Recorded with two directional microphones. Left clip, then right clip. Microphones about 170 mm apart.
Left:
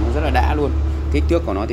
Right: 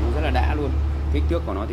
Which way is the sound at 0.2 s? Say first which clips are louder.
Left 7 dB; 45° left (ahead or behind).